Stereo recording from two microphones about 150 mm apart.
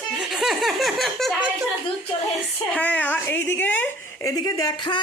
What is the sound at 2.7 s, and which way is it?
Speech, 10° left (ahead or behind).